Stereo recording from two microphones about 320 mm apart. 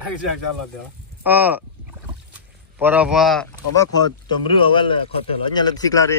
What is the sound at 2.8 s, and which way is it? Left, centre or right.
Speech, centre.